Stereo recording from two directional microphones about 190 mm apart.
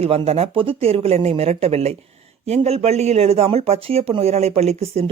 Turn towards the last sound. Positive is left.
turn(degrees=-35)  # may be behind; listen again after turning